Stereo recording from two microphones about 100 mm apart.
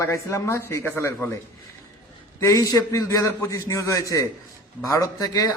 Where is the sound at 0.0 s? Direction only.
30° left (ahead or behind).